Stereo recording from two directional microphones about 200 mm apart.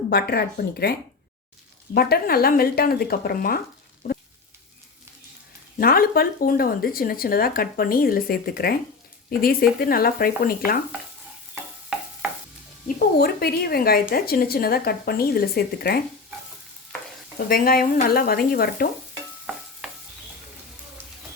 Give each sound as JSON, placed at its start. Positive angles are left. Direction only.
{"t": 0.1, "sound": "speech", "side_deg": 50}
{"t": 4.0, "sound": "a sound", "side_deg": 45}
{"t": 5.8, "sound": "speech", "side_deg": 50}
{"t": 11.9, "sound": "stir", "side_deg": -5}
{"t": 13.1, "sound": "speech", "side_deg": 50}
{"t": 17.3, "sound": "speech", "side_deg": 45}
{"t": 19.8, "sound": "stir", "side_deg": 0}